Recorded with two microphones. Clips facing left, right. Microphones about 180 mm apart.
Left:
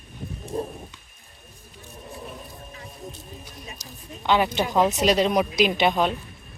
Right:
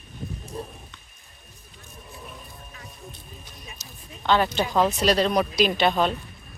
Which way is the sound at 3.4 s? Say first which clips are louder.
Left 4 dB; 15° left (ahead or behind).